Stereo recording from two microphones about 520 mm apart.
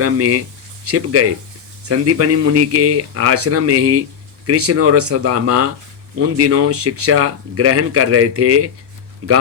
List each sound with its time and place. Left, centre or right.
0.0 s speech: right